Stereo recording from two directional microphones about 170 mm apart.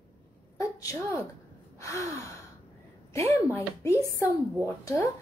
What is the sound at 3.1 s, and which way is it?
A woman's voice, 15° left (ahead or behind).